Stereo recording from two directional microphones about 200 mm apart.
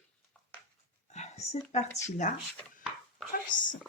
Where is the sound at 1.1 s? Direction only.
35° left (ahead or behind).